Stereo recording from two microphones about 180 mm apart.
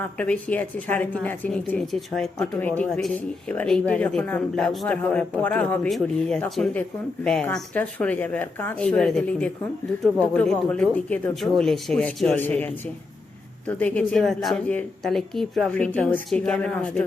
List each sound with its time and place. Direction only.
0.0 s a woman's voice: 10° left (ahead or behind)